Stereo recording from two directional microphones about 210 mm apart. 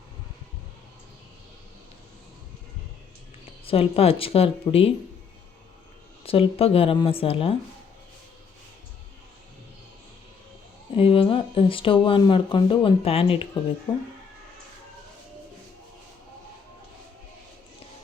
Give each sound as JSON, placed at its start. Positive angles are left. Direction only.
{"t": 3.7, "sound": "speech", "side_deg": 25}
{"t": 6.2, "sound": "speech", "side_deg": 25}
{"t": 10.9, "sound": "speech", "side_deg": 25}